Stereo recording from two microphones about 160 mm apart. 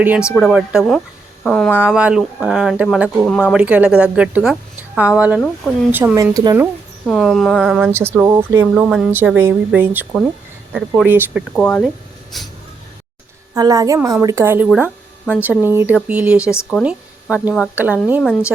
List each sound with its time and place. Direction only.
0.0 s speech: 10° right (ahead or behind)
1.7 s a woman's voice: 10° right (ahead or behind)
7.0 s speech: centre (ahead or behind)
11.5 s speech: 5° left (ahead or behind)
13.5 s a woman's voice: 20° right (ahead or behind)